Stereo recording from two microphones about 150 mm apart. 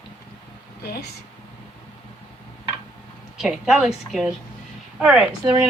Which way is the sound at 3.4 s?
Centre (ahead or behind).